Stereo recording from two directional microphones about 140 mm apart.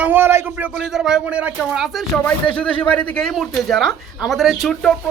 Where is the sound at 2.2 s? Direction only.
10° left (ahead or behind).